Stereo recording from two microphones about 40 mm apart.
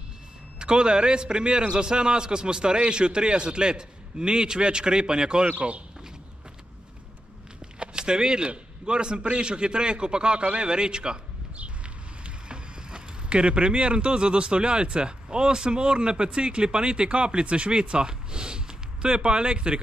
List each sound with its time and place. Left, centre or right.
0.6 s a man's voice: right
7.8 s a sound: right
8.8 s a man's voice: right
12.2 s a man's voice: right